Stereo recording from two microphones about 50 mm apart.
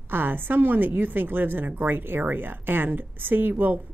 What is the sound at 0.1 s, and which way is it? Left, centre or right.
A woman's voice, right.